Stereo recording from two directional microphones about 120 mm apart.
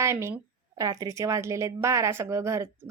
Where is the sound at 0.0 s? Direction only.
20° right (ahead or behind).